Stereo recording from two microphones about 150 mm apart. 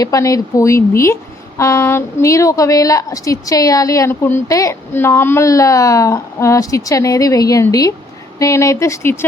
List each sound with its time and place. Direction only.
0.0 s speech: 25° left (ahead or behind)